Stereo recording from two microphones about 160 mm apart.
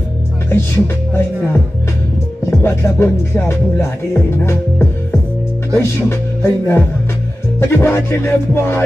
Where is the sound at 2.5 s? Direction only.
15° left (ahead or behind).